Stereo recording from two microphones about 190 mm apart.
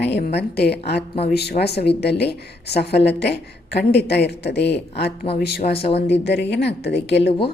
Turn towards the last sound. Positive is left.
turn(degrees=65)  # may be behind; listen again after turning